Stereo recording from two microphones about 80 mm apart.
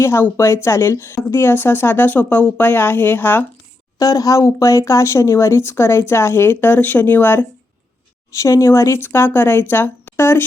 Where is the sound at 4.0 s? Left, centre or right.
Left.